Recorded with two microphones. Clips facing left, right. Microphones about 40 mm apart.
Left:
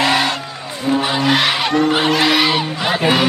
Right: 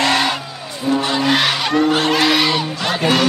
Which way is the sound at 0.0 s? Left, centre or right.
Centre.